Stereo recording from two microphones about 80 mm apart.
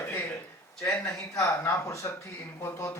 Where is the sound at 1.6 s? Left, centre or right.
Left.